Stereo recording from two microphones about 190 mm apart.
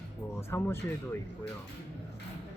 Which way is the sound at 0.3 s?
15° left (ahead or behind).